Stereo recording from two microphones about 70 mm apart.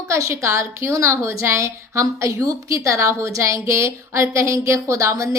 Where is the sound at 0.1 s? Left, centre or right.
Right.